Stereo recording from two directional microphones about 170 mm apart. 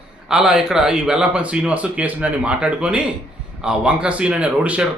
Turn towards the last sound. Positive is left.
turn(degrees=-10)  # may be behind; listen again after turning